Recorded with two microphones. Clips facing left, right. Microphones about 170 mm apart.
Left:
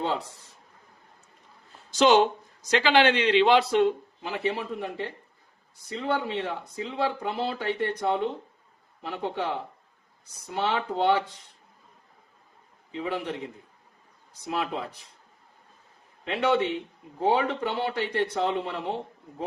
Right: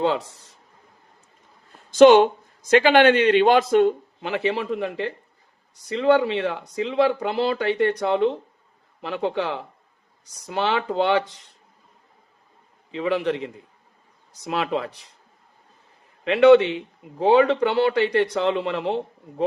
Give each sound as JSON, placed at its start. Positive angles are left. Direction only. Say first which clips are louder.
{"t": 1.9, "sound": "a man's voice", "louder": "right 8 dB", "side_deg": -55}
{"t": 4.2, "sound": "speech", "louder": "right 6 dB", "side_deg": -70}
{"t": 12.9, "sound": "speech", "louder": "right 8 dB", "side_deg": -75}
{"t": 16.2, "sound": "speech", "louder": "right 11 dB", "side_deg": -75}